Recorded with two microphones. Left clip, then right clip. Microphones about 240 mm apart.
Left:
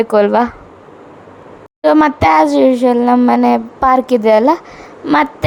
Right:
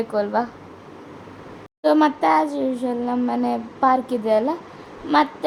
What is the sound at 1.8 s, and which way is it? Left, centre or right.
Speech, left.